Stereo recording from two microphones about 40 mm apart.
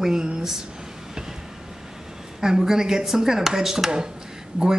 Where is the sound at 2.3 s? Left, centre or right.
Centre.